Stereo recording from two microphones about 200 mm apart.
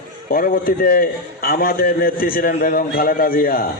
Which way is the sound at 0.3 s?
45° left (ahead or behind).